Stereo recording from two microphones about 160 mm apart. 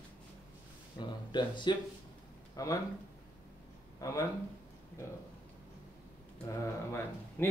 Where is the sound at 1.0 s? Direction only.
25° left (ahead or behind).